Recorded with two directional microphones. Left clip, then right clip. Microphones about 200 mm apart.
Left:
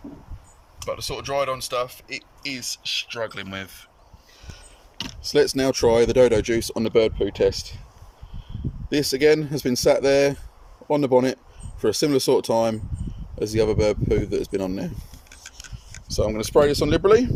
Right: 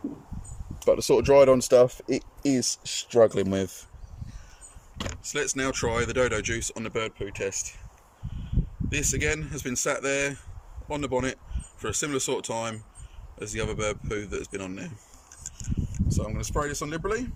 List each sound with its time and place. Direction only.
0.9 s speech: 45° right (ahead or behind); by 3.8 s 30° right (ahead or behind)
5.3 s speech: 25° left (ahead or behind)
8.9 s speech: 30° left (ahead or behind)
16.1 s speech: 40° left (ahead or behind)